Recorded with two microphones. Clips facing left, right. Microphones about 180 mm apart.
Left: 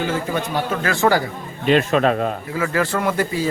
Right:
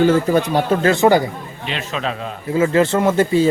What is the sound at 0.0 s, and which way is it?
Speech, 40° right (ahead or behind).